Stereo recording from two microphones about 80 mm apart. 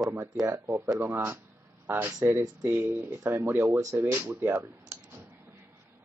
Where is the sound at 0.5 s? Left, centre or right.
Right.